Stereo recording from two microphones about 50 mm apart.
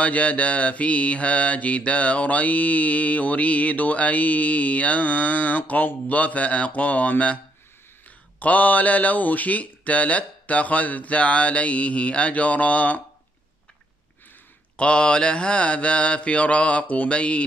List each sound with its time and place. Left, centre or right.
0.0 s mantra: left
8.4 s mantra: left
14.8 s mantra: centre